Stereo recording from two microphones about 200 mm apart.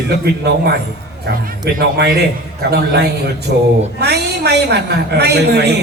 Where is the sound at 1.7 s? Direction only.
50° right (ahead or behind).